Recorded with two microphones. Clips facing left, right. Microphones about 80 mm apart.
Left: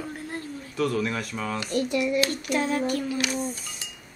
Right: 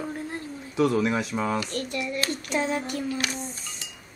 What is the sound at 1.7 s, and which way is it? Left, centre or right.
Hands, centre.